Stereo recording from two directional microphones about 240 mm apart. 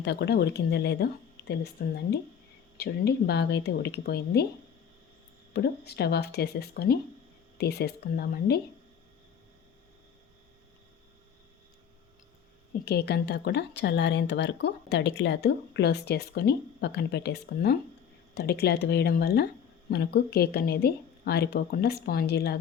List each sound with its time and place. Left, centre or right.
0.0 s speech: left
5.5 s speech: left
12.8 s speech: left